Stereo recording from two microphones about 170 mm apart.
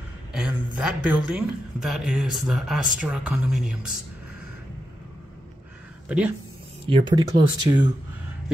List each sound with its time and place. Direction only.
0.3 s speech: 5° right (ahead or behind)
6.0 s speech: 5° right (ahead or behind)
6.9 s speech: 30° right (ahead or behind)